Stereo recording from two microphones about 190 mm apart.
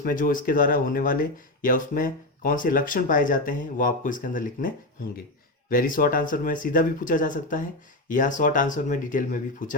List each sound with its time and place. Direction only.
0.0 s speech: 45° left (ahead or behind)